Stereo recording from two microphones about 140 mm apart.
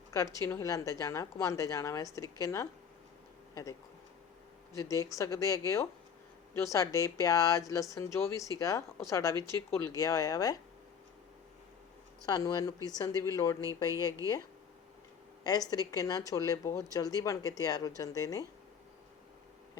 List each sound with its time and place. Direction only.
0.1 s a woman's voice: 20° left (ahead or behind)
12.2 s a woman's voice: 25° left (ahead or behind)
14.2 s speech: 20° right (ahead or behind)
15.4 s a woman's voice: 25° left (ahead or behind)